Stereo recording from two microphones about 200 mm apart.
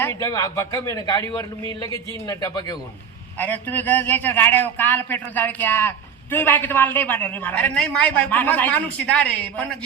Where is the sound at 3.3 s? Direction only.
10° left (ahead or behind).